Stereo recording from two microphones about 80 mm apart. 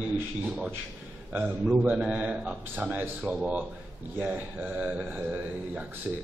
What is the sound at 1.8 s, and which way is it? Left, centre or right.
A man's voice, centre.